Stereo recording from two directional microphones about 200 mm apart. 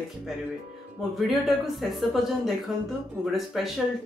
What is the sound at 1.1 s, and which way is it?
Bell, centre (ahead or behind).